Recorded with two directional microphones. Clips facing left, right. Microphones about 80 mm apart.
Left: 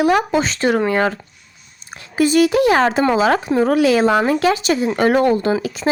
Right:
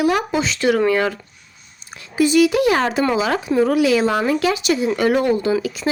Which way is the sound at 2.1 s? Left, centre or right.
Left.